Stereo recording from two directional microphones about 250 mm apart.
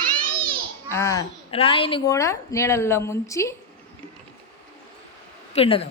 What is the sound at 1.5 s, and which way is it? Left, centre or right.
Speech, left.